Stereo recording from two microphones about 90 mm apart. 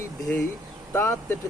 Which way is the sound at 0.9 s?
30° left (ahead or behind).